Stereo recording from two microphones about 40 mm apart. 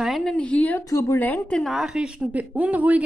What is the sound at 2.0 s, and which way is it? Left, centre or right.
A woman's voice, right.